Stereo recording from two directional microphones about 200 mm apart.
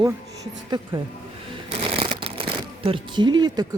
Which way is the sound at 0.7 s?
20° right (ahead or behind).